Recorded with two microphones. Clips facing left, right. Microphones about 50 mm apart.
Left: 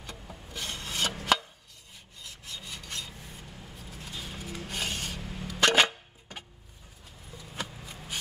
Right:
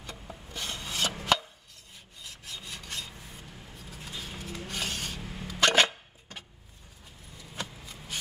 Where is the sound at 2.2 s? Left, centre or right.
Centre.